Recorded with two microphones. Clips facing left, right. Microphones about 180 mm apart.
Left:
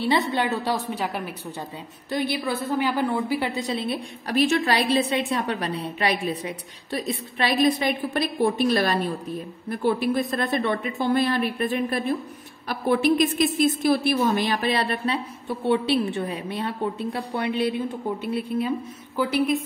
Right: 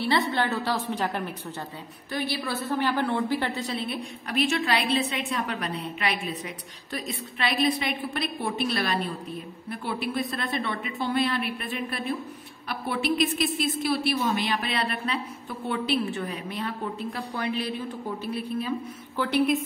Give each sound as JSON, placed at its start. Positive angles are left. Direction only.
{"t": 0.0, "sound": "a woman's voice", "side_deg": 15}
{"t": 4.3, "sound": "a woman's voice", "side_deg": 40}
{"t": 19.1, "sound": "a woman's voice", "side_deg": 5}